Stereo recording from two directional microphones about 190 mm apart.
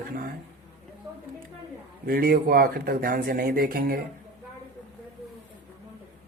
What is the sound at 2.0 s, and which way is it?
Speech, 55° right (ahead or behind).